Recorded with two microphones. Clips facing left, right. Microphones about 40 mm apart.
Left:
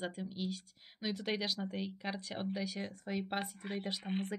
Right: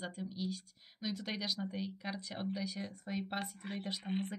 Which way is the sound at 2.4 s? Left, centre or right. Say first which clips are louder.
Even; centre.